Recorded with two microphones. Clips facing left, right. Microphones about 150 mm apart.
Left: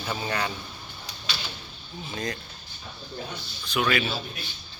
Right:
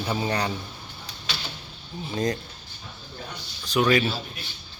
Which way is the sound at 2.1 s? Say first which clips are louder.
Right 7 dB; 35° right (ahead or behind).